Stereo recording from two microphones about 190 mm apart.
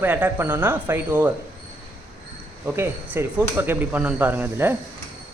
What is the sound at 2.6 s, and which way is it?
Speech, 10° right (ahead or behind).